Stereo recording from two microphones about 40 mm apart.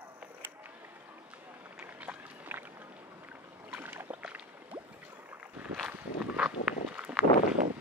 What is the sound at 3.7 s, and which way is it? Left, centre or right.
Boat, right.